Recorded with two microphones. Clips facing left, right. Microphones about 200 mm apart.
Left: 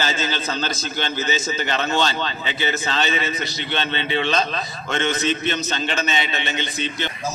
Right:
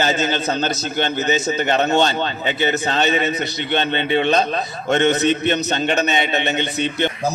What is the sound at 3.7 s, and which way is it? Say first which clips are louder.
A man's voice: right 5 dB; 50° right (ahead or behind).